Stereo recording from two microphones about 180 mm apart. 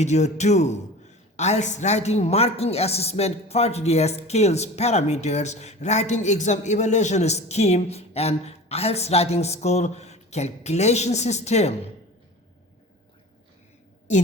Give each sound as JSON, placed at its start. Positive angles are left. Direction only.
{"t": 0.0, "sound": "a man's voice", "side_deg": 40}